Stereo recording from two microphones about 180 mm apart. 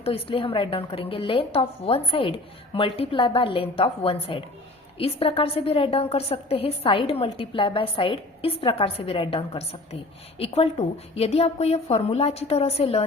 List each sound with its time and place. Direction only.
0.0 s a woman's voice: 30° left (ahead or behind)